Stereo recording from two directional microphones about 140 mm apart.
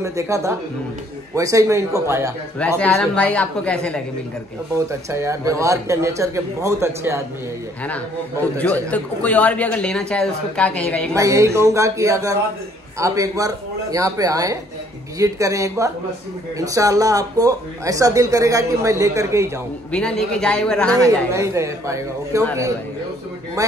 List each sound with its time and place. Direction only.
0.0 s speech: 20° right (ahead or behind)
2.8 s a man's voice: 10° left (ahead or behind)
4.7 s speech: 20° right (ahead or behind)
8.5 s a man's voice: 10° left (ahead or behind)
11.1 s speech: 20° right (ahead or behind)
19.9 s a man's voice: 5° left (ahead or behind)
21.3 s speech: 20° right (ahead or behind)